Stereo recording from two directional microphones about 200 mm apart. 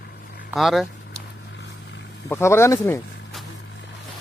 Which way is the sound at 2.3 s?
15° left (ahead or behind).